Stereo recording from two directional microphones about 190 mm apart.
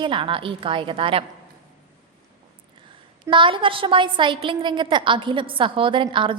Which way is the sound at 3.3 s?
25° right (ahead or behind).